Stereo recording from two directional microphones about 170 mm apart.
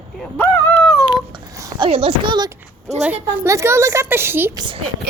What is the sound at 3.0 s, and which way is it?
A woman's voice, 10° right (ahead or behind).